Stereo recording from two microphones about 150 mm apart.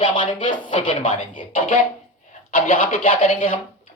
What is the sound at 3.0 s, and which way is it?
Speech, 40° left (ahead or behind).